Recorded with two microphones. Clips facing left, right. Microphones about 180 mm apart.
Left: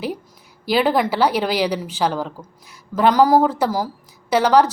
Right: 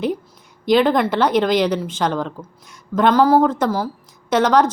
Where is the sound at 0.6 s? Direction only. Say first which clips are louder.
Right 3 dB; 5° left (ahead or behind).